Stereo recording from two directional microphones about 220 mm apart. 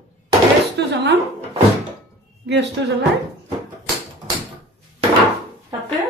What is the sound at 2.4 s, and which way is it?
Speech, 50° right (ahead or behind).